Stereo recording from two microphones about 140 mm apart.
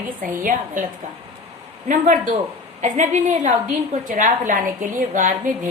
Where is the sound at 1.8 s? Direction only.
65° right (ahead or behind).